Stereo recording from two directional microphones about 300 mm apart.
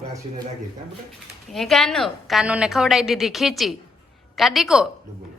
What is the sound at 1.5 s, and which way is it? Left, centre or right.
A woman's voice, centre.